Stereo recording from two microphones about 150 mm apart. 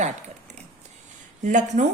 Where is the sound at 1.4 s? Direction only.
55° right (ahead or behind).